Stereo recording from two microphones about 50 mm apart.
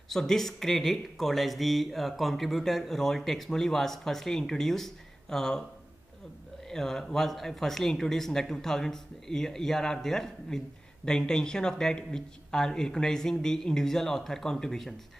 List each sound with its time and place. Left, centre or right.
0.1 s speech: centre
6.7 s speech: centre